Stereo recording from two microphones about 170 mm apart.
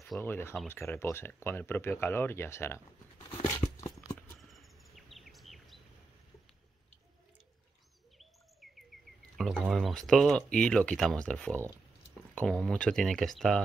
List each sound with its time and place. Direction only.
0.2 s speech: 15° left (ahead or behind)
3.2 s a sound: 30° left (ahead or behind)
4.4 s bird vocalization: centre (ahead or behind)
8.2 s bird: centre (ahead or behind)
9.4 s speech: centre (ahead or behind)